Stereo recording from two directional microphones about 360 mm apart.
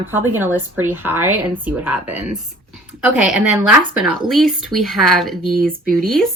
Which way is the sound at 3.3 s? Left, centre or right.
Centre.